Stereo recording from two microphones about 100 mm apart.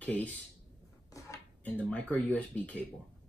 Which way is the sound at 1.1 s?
30° left (ahead or behind).